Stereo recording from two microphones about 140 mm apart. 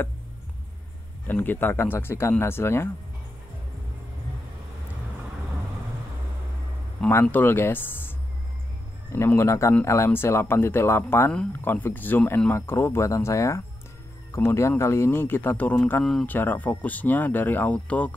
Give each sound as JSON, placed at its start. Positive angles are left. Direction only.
{"t": 1.2, "sound": "speech", "side_deg": 15}
{"t": 7.0, "sound": "speech", "side_deg": 15}
{"t": 9.1, "sound": "speech", "side_deg": 15}
{"t": 16.3, "sound": "speech", "side_deg": 15}